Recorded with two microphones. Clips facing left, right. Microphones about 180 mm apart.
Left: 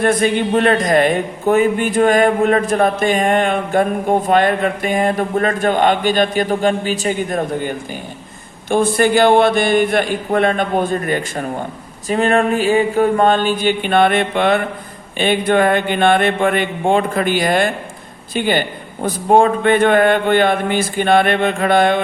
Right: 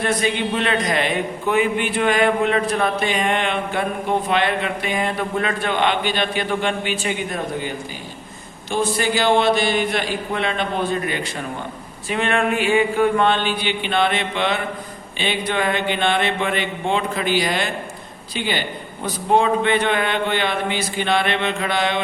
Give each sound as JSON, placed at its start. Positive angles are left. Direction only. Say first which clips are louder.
{"t": 0.0, "sound": "a man's voice", "louder": "left 6 dB", "side_deg": 50}
{"t": 8.7, "sound": "a man's voice", "louder": "left 7 dB", "side_deg": 55}